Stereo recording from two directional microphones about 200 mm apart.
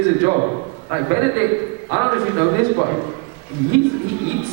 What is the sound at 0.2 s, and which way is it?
A man's voice, 25° right (ahead or behind).